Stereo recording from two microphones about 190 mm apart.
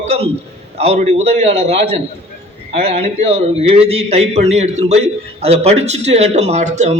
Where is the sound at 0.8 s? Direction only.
35° right (ahead or behind).